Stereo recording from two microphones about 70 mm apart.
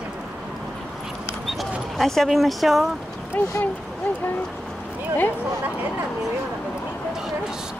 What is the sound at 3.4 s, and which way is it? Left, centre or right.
Speech, left.